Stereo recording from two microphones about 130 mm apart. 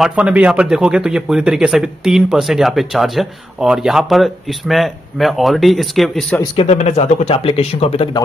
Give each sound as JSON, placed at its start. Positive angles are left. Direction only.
{"t": 0.0, "sound": "speech", "side_deg": -10}
{"t": 6.5, "sound": "speech", "side_deg": 50}